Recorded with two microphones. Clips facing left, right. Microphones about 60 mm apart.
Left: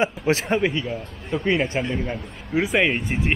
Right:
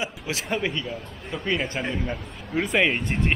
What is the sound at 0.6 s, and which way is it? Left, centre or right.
Speech, centre.